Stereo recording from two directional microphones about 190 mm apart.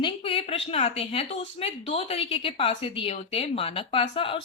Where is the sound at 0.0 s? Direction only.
30° left (ahead or behind).